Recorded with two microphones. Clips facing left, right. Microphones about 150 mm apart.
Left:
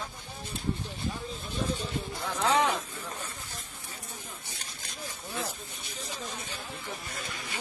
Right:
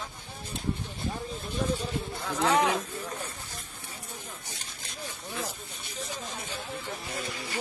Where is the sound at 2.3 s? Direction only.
5° right (ahead or behind).